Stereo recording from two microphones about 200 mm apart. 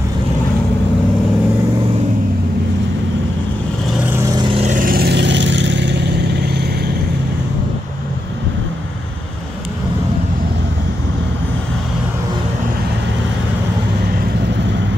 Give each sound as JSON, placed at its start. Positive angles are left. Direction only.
{"t": 4.1, "sound": "vehicle", "side_deg": -15}